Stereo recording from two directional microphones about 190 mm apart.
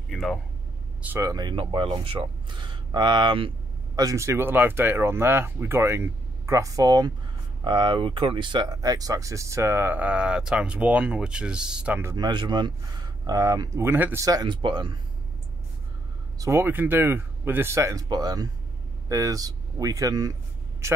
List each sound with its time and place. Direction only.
0.1 s a sound: 5° left (ahead or behind)
1.0 s speech: 15° right (ahead or behind)
16.3 s a man's voice: 15° right (ahead or behind)